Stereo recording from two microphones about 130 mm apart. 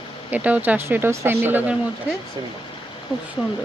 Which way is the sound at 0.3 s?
10° right (ahead or behind).